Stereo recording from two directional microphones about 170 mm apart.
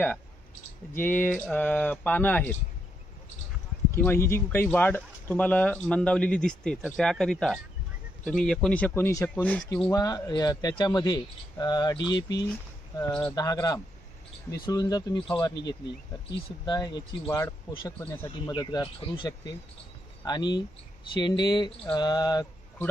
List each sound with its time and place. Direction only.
0.9 s speech: 10° left (ahead or behind)
3.9 s speech: 15° left (ahead or behind)
9.8 s speech: 20° left (ahead or behind)